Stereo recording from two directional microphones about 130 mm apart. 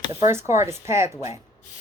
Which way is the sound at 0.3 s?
20° right (ahead or behind).